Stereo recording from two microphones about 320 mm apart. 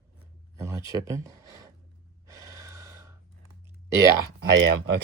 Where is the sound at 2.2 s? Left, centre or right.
Centre.